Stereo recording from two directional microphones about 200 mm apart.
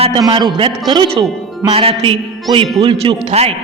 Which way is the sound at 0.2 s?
25° right (ahead or behind).